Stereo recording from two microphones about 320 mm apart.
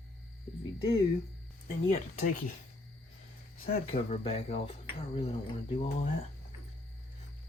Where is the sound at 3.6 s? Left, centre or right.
Centre.